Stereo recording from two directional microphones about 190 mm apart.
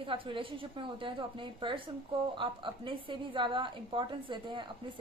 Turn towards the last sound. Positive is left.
turn(degrees=-25)  # may be behind; listen again after turning